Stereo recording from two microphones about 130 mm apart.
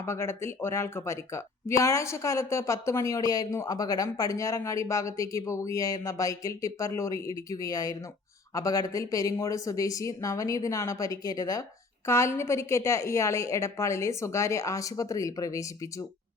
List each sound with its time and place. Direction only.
0.0 s speech: 20° left (ahead or behind)